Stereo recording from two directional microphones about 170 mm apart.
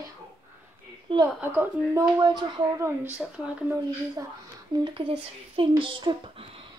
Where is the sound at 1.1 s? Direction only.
30° right (ahead or behind).